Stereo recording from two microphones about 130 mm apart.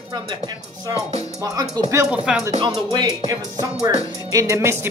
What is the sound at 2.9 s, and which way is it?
Music, 30° right (ahead or behind).